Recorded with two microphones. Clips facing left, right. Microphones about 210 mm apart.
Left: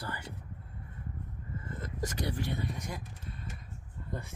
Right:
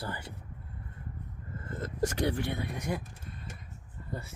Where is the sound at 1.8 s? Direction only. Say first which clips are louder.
Right 7 dB; 60° right (ahead or behind).